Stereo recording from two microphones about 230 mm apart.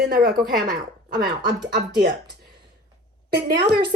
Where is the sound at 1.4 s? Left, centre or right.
Right.